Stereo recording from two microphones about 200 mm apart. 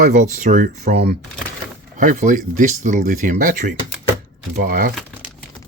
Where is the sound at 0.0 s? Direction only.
35° right (ahead or behind).